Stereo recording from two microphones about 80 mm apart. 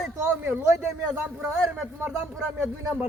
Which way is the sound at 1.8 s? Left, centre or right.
Centre.